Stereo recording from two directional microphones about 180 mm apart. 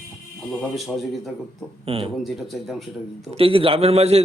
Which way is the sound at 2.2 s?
Centre (ahead or behind).